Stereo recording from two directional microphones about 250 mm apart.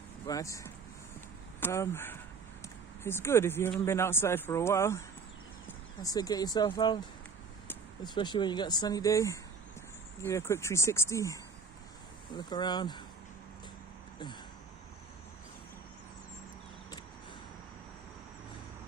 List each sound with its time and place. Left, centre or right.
0.3 s speech: centre